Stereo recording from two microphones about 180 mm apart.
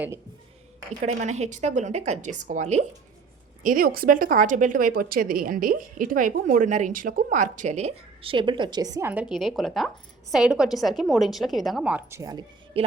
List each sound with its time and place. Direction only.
1.0 s a woman's voice: 40° right (ahead or behind)
3.6 s a woman's voice: 50° right (ahead or behind); by 12.2 s 10° right (ahead or behind)
12.2 s a woman's voice: 25° right (ahead or behind)